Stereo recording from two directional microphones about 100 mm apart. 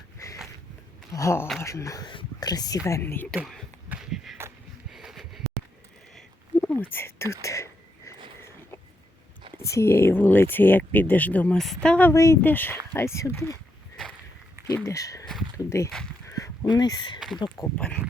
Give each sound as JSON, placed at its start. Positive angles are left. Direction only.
{"t": 1.1, "sound": "speech", "side_deg": 30}
{"t": 2.0, "sound": "speech", "side_deg": 45}
{"t": 3.0, "sound": "speech", "side_deg": 20}
{"t": 3.3, "sound": "speech", "side_deg": 0}
{"t": 3.8, "sound": "a sound", "side_deg": -5}
{"t": 6.6, "sound": "a sound", "side_deg": 20}
{"t": 9.6, "sound": "speech", "side_deg": 30}
{"t": 11.5, "sound": "speech", "side_deg": 5}
{"t": 12.1, "sound": "speech", "side_deg": 30}
{"t": 12.4, "sound": "speech", "side_deg": 20}
{"t": 14.8, "sound": "speech", "side_deg": 35}
{"t": 16.2, "sound": "a sound", "side_deg": 35}
{"t": 16.6, "sound": "speech", "side_deg": 40}
{"t": 17.2, "sound": "speech", "side_deg": 0}